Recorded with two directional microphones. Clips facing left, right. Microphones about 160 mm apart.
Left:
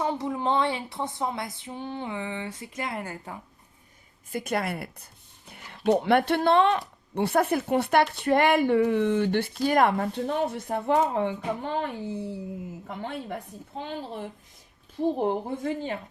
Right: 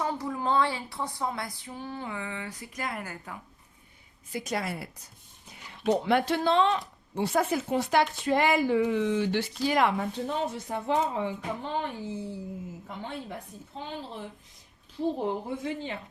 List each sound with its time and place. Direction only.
0.0 s a sound: 20° left (ahead or behind)
4.3 s speech: 55° left (ahead or behind)
15.2 s a woman's voice: 55° left (ahead or behind)